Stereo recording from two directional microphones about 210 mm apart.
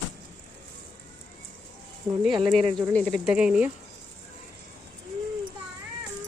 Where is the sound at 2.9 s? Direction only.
5° left (ahead or behind).